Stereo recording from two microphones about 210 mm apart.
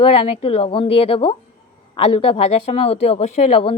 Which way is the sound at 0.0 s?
30° left (ahead or behind).